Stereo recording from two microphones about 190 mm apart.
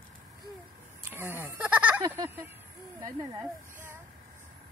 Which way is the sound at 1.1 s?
15° right (ahead or behind).